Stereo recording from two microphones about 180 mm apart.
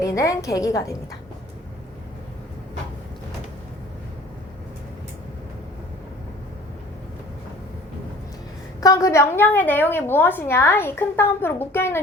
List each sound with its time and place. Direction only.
0.0 s a woman's voice: 15° left (ahead or behind)
8.8 s a woman's voice: 20° left (ahead or behind)